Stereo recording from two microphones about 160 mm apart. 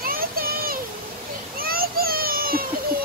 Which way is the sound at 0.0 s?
65° right (ahead or behind).